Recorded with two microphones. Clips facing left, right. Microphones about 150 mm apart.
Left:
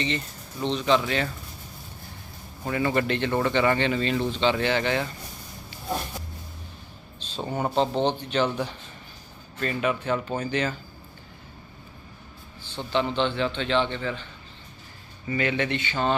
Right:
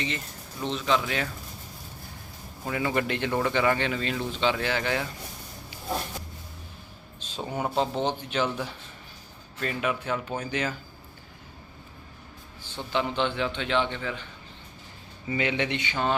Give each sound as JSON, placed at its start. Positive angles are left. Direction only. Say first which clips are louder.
{"t": 0.6, "sound": "speech", "louder": "left 4 dB", "side_deg": -5}
{"t": 2.6, "sound": "speech", "louder": "left 3 dB", "side_deg": -5}
{"t": 7.2, "sound": "a man's voice", "louder": "left 2 dB", "side_deg": -10}
{"t": 9.6, "sound": "a man's voice", "louder": "left 3 dB", "side_deg": -5}
{"t": 12.6, "sound": "a man's voice", "louder": "left 3 dB", "side_deg": -10}
{"t": 15.3, "sound": "a man's voice", "louder": "left 2 dB", "side_deg": -15}